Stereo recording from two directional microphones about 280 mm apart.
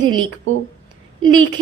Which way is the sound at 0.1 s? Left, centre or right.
Right.